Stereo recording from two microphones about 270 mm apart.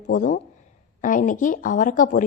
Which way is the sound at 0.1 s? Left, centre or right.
Left.